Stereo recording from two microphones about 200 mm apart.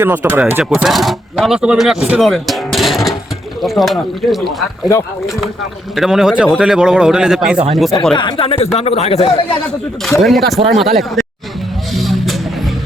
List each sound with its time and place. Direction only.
0.0 s speech: 10° right (ahead or behind)
6.0 s speech: centre (ahead or behind)
8.1 s speech: 25° left (ahead or behind)
10.1 s speech: centre (ahead or behind)
11.9 s vehicle: centre (ahead or behind)